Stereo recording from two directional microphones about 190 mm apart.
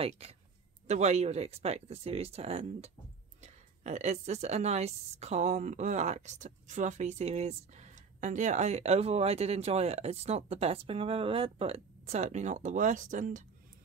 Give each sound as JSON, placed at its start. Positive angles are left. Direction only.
{"t": 0.0, "sound": "a woman's voice", "side_deg": -35}